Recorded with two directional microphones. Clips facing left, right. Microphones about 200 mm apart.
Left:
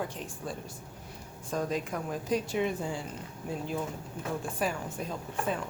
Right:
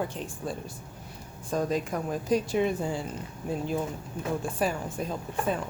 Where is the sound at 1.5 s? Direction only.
35° right (ahead or behind).